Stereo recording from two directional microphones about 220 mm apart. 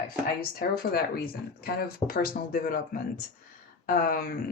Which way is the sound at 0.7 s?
45° left (ahead or behind).